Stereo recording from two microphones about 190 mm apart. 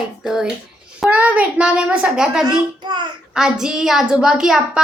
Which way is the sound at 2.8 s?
25° right (ahead or behind).